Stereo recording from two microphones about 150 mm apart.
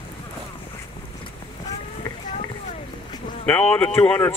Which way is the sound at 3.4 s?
10° left (ahead or behind).